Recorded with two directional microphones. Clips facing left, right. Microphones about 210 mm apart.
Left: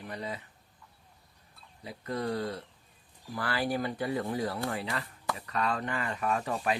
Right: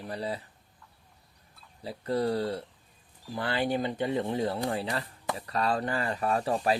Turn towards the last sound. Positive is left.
turn(degrees=-35)  # may be behind; listen again after turning